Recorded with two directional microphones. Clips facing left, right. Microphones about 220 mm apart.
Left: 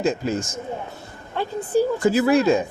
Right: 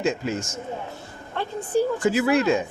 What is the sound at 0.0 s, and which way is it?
Speech, 35° left (ahead or behind).